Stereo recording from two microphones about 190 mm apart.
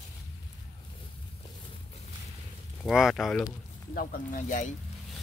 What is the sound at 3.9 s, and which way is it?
Speech, 50° left (ahead or behind).